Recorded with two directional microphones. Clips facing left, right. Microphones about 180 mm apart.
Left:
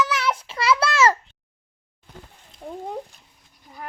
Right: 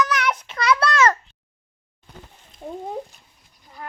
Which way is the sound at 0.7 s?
5° left (ahead or behind).